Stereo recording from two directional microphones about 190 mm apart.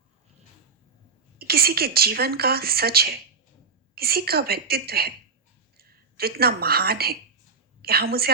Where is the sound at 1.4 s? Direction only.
55° right (ahead or behind).